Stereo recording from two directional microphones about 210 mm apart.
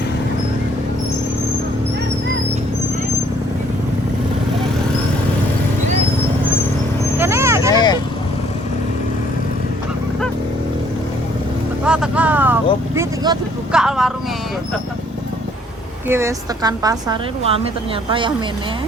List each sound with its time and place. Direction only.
7.2 s vehicle: 10° right (ahead or behind)
7.7 s vehicle: 20° left (ahead or behind)
11.9 s vehicle: 5° right (ahead or behind)
13.0 s vehicle: 20° right (ahead or behind)
13.7 s vehicle: centre (ahead or behind)
16.0 s a woman's voice: 10° right (ahead or behind)